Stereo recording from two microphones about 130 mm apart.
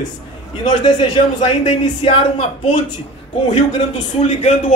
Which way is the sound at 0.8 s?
40° left (ahead or behind).